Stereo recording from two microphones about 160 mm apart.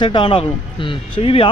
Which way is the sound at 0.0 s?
30° left (ahead or behind).